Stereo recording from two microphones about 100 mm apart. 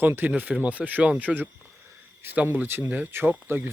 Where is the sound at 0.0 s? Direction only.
20° right (ahead or behind).